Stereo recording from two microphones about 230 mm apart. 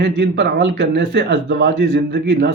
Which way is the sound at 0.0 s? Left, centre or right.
Right.